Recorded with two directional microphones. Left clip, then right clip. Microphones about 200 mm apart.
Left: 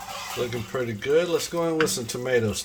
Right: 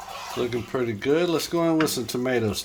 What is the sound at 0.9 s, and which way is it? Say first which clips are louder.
Speech: left 1 dB; 40° right (ahead or behind).